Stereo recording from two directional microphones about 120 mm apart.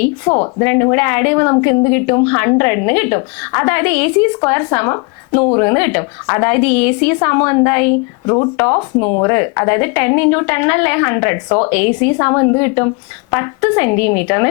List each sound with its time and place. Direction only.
0.0 s a woman's voice: 25° left (ahead or behind)